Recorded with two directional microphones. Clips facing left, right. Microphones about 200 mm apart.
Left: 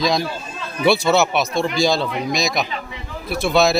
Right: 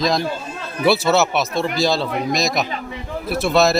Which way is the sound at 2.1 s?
50° right (ahead or behind).